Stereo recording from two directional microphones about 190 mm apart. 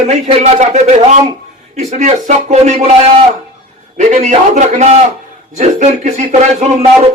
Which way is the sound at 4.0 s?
40° right (ahead or behind).